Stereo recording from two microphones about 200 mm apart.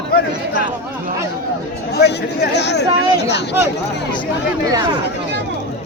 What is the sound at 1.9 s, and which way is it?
Speech, 55° left (ahead or behind).